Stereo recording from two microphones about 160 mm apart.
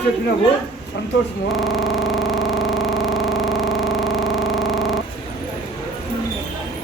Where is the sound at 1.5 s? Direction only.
Centre (ahead or behind).